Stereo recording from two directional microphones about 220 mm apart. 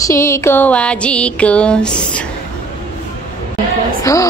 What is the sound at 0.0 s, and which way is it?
Speech, 15° left (ahead or behind).